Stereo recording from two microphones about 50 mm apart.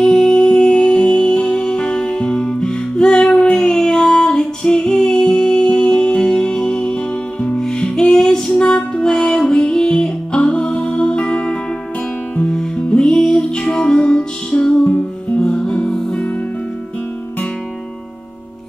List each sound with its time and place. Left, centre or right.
0.0 s music: centre